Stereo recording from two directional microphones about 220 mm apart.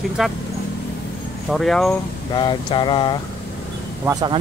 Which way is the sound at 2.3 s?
20° left (ahead or behind).